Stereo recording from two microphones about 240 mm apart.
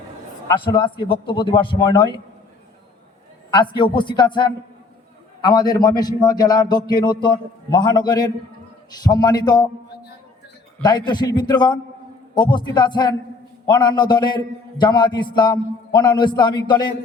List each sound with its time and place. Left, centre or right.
0.4 s a man's voice: left
3.5 s a man's voice: centre
10.8 s a man's voice: centre